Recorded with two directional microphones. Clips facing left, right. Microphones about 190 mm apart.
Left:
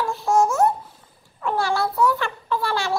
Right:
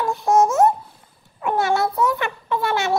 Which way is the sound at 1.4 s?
20° right (ahead or behind).